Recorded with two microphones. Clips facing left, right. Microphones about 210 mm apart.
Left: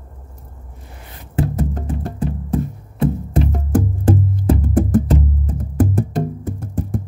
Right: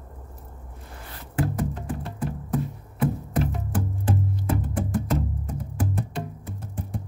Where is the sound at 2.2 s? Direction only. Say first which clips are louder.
Left 6 dB; 25° left (ahead or behind).